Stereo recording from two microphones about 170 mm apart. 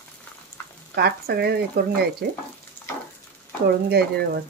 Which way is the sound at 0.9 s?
70° right (ahead or behind).